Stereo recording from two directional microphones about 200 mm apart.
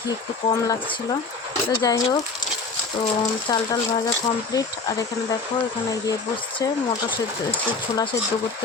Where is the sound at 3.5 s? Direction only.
20° left (ahead or behind).